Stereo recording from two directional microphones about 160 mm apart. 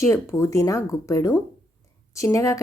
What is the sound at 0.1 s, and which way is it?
Speech, 20° left (ahead or behind).